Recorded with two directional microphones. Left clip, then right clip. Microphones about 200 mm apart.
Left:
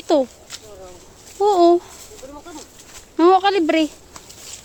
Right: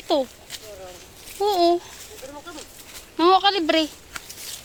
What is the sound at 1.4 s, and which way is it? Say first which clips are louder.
Speech: left 5 dB; 40° left (ahead or behind).